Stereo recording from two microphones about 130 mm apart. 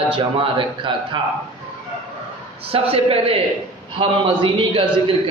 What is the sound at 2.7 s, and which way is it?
A man's voice, 45° right (ahead or behind).